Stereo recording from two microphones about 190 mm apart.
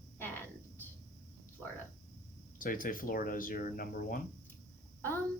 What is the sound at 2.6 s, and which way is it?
Speech, 45° left (ahead or behind).